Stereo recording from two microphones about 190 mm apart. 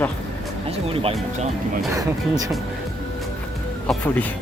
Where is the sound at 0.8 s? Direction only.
30° right (ahead or behind).